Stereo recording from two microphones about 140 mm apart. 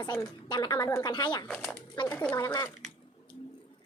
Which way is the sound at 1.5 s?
5° left (ahead or behind).